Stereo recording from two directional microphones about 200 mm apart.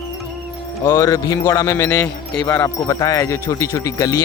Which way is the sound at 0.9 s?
15° left (ahead or behind).